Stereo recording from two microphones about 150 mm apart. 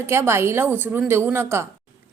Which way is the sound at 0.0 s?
15° right (ahead or behind).